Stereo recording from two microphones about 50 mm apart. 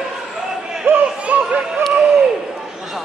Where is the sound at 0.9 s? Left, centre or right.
Right.